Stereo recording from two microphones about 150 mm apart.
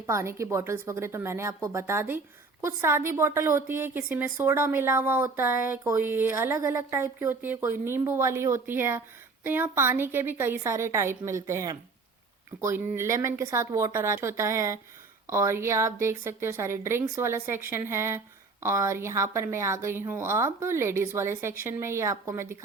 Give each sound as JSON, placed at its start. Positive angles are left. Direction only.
{"t": 0.0, "sound": "a woman's voice", "side_deg": -20}